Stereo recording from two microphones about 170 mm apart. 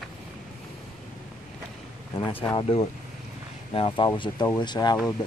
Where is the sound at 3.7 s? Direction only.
30° left (ahead or behind).